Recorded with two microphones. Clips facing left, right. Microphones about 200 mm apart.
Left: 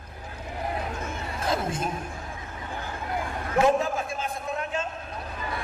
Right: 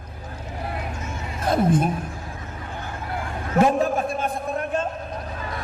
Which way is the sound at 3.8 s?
55° right (ahead or behind).